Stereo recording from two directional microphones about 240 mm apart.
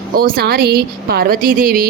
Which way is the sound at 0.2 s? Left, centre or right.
Right.